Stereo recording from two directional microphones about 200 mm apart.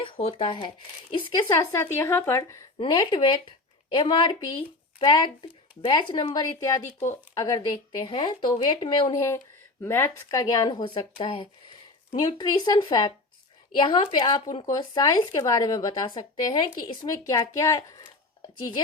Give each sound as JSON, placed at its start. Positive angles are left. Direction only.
{"t": 0.0, "sound": "speech", "side_deg": 30}